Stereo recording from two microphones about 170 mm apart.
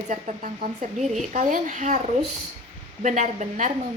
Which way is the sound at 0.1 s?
45° right (ahead or behind).